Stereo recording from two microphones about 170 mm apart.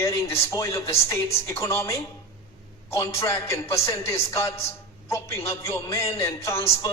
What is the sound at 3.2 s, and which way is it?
A man's voice, 15° left (ahead or behind).